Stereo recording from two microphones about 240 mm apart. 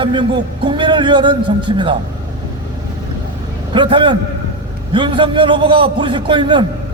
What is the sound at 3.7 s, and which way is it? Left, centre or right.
A man's voice, centre.